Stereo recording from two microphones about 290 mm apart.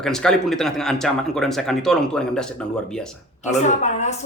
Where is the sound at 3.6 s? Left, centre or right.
Left.